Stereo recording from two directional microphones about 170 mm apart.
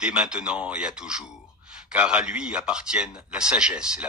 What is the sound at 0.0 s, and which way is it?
A man's voice, 5° right (ahead or behind).